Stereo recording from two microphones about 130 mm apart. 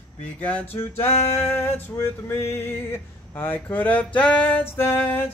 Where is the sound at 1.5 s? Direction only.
20° left (ahead or behind).